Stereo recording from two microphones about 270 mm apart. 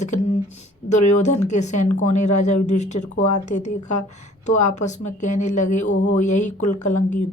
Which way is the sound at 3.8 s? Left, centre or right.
Left.